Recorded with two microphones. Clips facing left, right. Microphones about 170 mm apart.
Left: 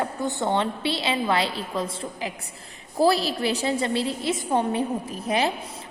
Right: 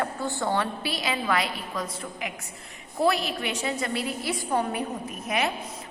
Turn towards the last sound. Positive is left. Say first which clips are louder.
# left 3 dB
turn(degrees=30)  # may be behind; listen again after turning